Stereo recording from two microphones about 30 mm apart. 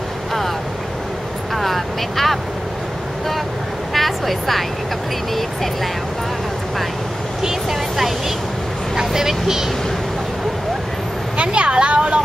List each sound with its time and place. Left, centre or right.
1.5 s vehicle: centre
3.9 s speech: centre
8.9 s speech: centre
11.3 s speech: right